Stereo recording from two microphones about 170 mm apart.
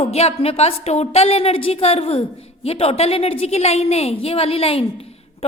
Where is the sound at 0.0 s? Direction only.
35° left (ahead or behind).